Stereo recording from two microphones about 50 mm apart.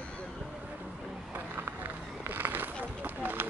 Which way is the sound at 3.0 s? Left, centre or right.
Right.